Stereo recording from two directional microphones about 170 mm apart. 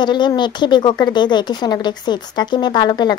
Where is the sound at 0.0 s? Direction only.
25° left (ahead or behind).